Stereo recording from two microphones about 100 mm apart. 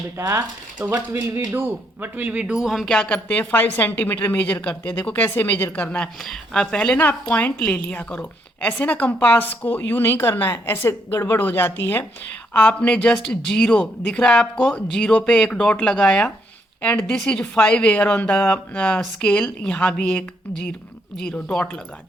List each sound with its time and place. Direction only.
0.2 s a woman's voice: 25° right (ahead or behind); by 6.1 s 15° left (ahead or behind)
6.1 s a woman's voice: 5° left (ahead or behind)